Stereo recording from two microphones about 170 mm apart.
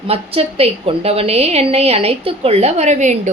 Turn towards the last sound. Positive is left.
turn(degrees=-45)  # may be behind; listen again after turning